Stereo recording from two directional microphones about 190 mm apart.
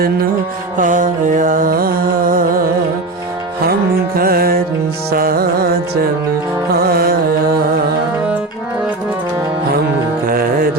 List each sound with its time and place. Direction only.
0.8 s music: 45° right (ahead or behind)
4.2 s music: 50° right (ahead or behind)
6.7 s music: 50° right (ahead or behind)
10.2 s music: 50° right (ahead or behind)